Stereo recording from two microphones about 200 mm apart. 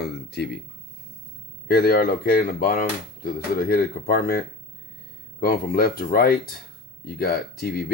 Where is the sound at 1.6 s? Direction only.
50° left (ahead or behind).